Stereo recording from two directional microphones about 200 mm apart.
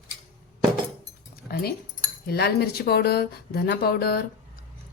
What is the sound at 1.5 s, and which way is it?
A woman's voice, 50° left (ahead or behind).